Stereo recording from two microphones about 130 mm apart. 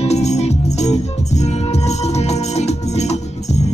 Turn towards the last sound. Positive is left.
turn(degrees=60)  # may be behind; listen again after turning